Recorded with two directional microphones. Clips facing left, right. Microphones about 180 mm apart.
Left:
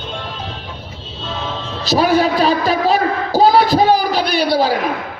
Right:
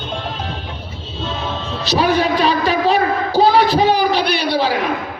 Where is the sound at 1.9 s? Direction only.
40° left (ahead or behind).